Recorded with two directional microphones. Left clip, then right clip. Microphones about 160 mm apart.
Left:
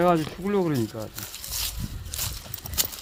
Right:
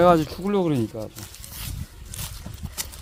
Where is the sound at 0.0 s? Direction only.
40° right (ahead or behind).